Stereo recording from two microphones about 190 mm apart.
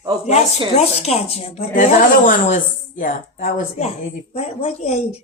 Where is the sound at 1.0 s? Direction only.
35° left (ahead or behind).